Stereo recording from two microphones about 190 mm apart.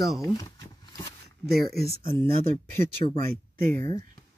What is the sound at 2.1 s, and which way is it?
Speech, 10° left (ahead or behind).